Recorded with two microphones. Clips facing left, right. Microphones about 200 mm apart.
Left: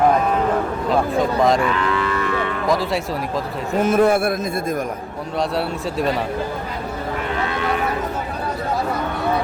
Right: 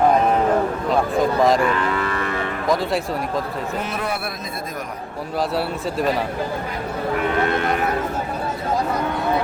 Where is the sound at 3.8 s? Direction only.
50° left (ahead or behind).